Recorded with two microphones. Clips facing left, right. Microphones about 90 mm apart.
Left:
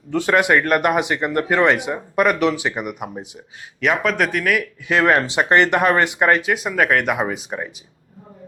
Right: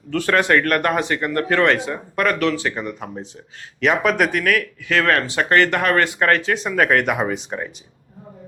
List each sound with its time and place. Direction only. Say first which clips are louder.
0.1 s speech: left 1 dB; 15° left (ahead or behind)
3.8 s speech: right 1 dB; centre (ahead or behind)
4.9 s speech: left 2 dB; 15° left (ahead or behind)